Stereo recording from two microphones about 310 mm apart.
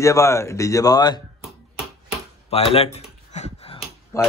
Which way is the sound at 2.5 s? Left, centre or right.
Centre.